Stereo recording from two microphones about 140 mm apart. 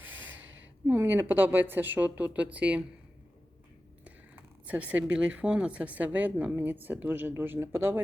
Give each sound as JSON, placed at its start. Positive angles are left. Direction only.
{"t": 0.0, "sound": "a sound", "side_deg": -15}
{"t": 0.9, "sound": "speech", "side_deg": -15}
{"t": 4.0, "sound": "speech", "side_deg": -10}